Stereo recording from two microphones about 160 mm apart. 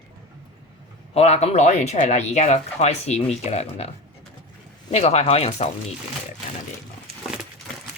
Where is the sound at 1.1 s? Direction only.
40° left (ahead or behind).